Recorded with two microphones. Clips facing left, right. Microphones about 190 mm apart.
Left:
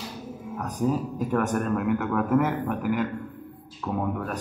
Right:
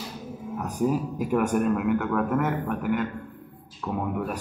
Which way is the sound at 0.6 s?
10° right (ahead or behind).